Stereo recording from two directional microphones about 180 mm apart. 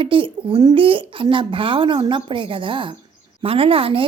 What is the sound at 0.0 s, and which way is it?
A woman's voice, 30° right (ahead or behind).